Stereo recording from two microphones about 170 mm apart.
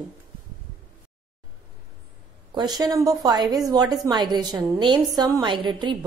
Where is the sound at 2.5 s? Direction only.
25° right (ahead or behind).